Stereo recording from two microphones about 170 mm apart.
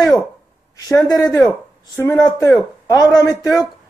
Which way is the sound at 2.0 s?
15° left (ahead or behind).